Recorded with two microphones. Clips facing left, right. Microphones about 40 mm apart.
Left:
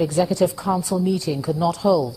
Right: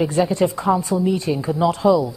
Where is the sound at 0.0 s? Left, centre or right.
Right.